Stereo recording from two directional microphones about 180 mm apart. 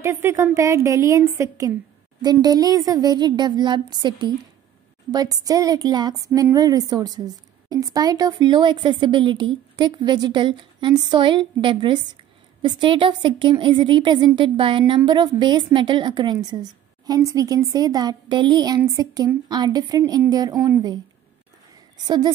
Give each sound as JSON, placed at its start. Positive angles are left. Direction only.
{"t": 0.0, "sound": "a woman's voice", "side_deg": -15}
{"t": 22.0, "sound": "speech", "side_deg": -25}